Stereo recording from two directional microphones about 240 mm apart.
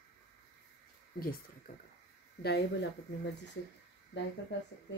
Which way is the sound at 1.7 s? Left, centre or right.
Left.